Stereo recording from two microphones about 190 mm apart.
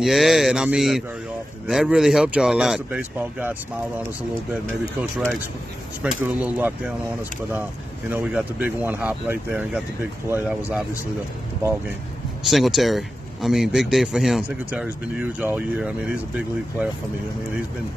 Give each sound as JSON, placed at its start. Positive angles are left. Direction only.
{"t": 0.0, "sound": "a man's voice", "side_deg": 0}
{"t": 6.0, "sound": "speech", "side_deg": -5}
{"t": 8.1, "sound": "a man's voice", "side_deg": -5}
{"t": 12.4, "sound": "a man's voice", "side_deg": 0}